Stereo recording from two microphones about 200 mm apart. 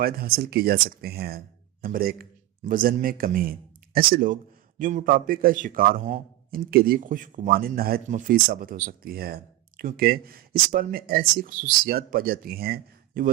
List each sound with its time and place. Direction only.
0.0 s a man's voice: 50° right (ahead or behind)